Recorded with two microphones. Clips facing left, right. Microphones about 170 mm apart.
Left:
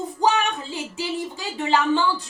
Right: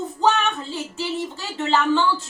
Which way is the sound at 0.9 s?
15° left (ahead or behind).